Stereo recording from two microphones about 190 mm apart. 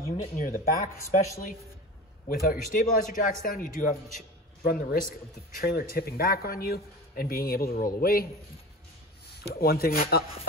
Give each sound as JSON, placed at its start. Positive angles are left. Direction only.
{"t": 0.2, "sound": "speech", "side_deg": 50}
{"t": 2.2, "sound": "speech", "side_deg": 45}
{"t": 9.5, "sound": "speech", "side_deg": 55}